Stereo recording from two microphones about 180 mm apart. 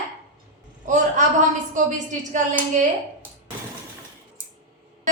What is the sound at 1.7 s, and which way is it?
Speech, 45° right (ahead or behind).